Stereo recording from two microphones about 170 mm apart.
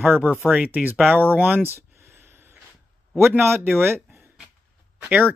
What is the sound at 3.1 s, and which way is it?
Speech, 15° right (ahead or behind).